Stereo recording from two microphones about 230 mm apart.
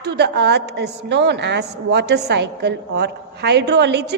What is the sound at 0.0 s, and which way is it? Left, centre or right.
A woman's voice, right.